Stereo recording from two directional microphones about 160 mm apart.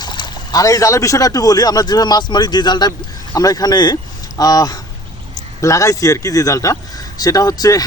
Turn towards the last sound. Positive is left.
turn(degrees=25)  # may be behind; listen again after turning